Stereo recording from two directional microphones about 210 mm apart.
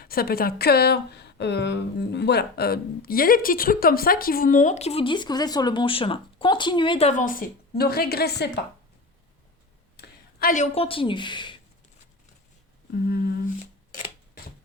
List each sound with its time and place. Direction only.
0.0 s speech: 45° left (ahead or behind)
10.0 s speech: 40° left (ahead or behind); by 11.5 s 20° left (ahead or behind)